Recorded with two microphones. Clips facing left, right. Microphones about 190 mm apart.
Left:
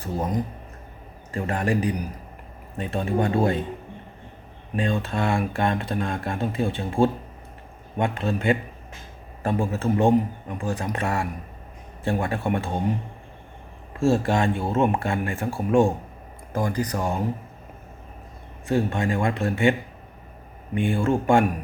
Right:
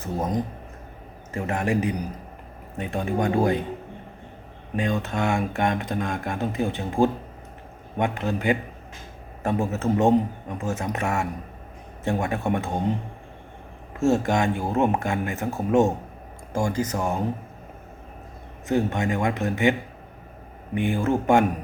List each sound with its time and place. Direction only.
0.0 s speech: 20° right (ahead or behind)
4.8 s speech: 15° right (ahead or behind)
14.0 s speech: 15° right (ahead or behind)
18.7 s speech: 15° right (ahead or behind)
20.7 s speech: 15° right (ahead or behind)